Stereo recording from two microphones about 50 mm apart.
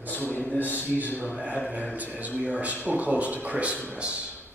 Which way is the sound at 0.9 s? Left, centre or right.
Right.